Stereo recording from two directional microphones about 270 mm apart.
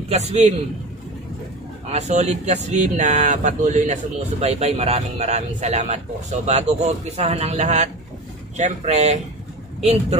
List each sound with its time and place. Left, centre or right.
0.1 s speech: right
1.9 s speech: right